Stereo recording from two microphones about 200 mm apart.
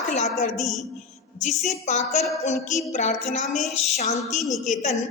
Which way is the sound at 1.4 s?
35° left (ahead or behind).